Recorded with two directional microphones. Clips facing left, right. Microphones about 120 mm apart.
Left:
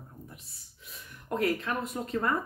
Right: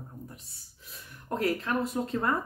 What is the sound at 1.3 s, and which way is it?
Speech, 30° right (ahead or behind).